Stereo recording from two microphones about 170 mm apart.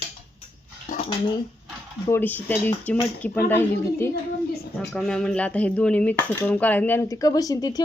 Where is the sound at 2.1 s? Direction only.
10° left (ahead or behind).